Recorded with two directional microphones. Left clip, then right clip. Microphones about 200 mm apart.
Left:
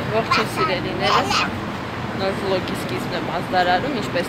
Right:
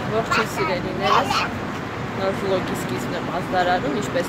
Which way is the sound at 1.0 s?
40° left (ahead or behind).